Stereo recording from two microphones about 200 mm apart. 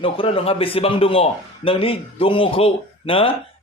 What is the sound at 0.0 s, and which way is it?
A man's voice, 30° left (ahead or behind).